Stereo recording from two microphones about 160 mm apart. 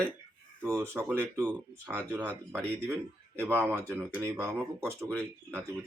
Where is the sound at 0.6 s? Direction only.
20° right (ahead or behind).